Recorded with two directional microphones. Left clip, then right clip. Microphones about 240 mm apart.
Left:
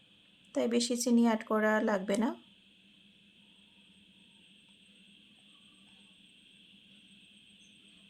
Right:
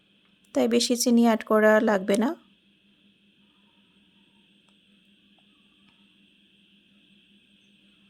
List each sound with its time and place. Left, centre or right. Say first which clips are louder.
0.5 s speech: right 8 dB; right